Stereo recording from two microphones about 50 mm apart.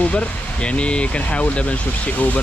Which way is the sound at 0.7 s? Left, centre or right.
Left.